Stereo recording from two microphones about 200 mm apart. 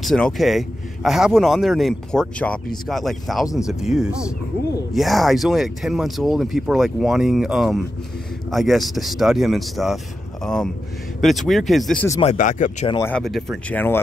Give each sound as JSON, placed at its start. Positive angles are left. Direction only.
{"t": 0.0, "sound": "speech", "side_deg": 0}
{"t": 12.2, "sound": "speech", "side_deg": 35}
{"t": 13.0, "sound": "speech", "side_deg": 5}